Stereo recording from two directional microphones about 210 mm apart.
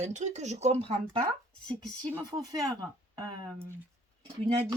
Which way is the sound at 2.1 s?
20° right (ahead or behind).